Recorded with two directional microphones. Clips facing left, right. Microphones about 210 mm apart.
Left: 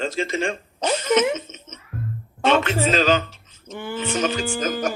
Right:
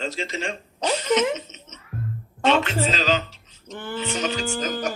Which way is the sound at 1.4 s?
50° left (ahead or behind).